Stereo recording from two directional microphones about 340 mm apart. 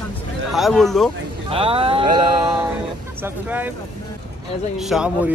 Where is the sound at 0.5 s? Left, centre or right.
Centre.